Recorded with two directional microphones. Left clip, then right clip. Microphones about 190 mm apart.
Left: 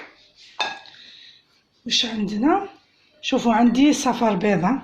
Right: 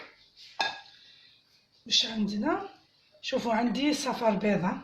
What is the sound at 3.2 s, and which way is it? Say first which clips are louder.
A woman's voice: left 9 dB; 35° left (ahead or behind).